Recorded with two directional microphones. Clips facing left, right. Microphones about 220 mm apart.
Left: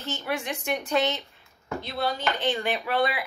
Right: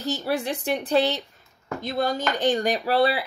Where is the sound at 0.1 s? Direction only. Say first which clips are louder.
Right 4 dB; 40° right (ahead or behind).